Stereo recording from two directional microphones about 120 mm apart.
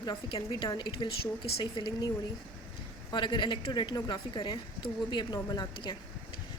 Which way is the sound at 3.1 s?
40° left (ahead or behind).